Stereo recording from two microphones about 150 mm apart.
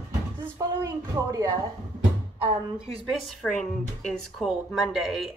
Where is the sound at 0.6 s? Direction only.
25° right (ahead or behind).